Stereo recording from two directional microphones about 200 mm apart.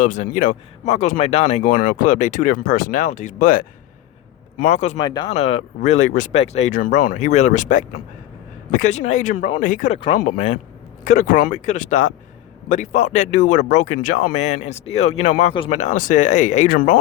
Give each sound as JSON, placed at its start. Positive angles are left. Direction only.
{"t": 0.0, "sound": "speech", "side_deg": 40}
{"t": 4.9, "sound": "speech", "side_deg": 20}
{"t": 5.3, "sound": "speech", "side_deg": 35}